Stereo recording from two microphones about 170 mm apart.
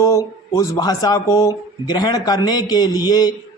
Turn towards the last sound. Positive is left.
turn(degrees=25)  # may be behind; listen again after turning